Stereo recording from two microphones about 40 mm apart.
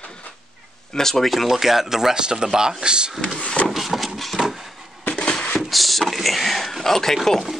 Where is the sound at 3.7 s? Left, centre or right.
Centre.